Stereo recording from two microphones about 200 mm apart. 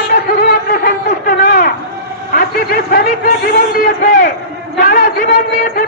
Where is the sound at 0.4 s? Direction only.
45° left (ahead or behind).